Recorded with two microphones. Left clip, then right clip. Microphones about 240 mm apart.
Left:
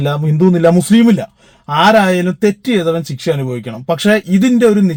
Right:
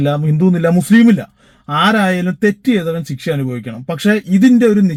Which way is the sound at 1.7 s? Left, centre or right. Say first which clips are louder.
Left 4 dB; left.